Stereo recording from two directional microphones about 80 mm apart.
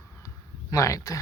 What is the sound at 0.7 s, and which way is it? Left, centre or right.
Speech, left.